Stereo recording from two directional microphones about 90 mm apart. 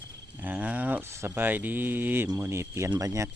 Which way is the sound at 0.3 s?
20° right (ahead or behind).